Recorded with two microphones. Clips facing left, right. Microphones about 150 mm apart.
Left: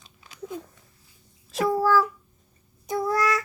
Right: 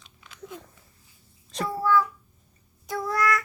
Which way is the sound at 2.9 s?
25° left (ahead or behind).